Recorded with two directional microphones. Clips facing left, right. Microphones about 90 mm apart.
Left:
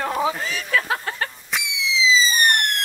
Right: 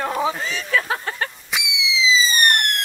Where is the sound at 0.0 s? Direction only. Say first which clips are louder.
Even; 30° right (ahead or behind).